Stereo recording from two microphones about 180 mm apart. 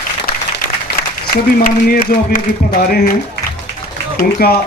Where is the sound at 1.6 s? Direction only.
55° left (ahead or behind).